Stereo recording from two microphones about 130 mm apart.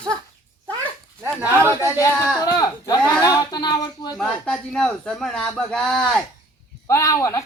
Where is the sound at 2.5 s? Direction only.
30° left (ahead or behind).